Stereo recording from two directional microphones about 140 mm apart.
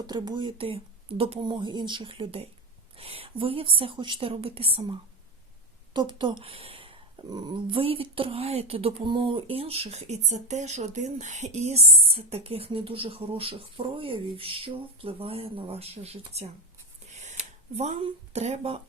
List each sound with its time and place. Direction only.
0.1 s speech: 35° right (ahead or behind); by 16.5 s 50° right (ahead or behind)
17.1 s a sound: 55° right (ahead or behind)
17.7 s speech: 45° right (ahead or behind)